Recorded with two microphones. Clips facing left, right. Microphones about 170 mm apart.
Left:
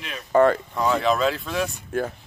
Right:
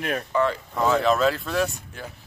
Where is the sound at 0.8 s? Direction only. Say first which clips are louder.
Right 3 dB; centre (ahead or behind).